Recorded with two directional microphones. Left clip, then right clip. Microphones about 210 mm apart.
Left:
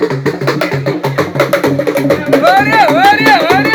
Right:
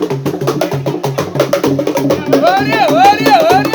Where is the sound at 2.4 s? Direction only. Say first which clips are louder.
Left 4 dB; 25° right (ahead or behind).